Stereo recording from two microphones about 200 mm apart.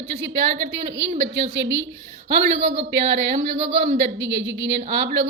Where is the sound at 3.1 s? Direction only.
65° right (ahead or behind).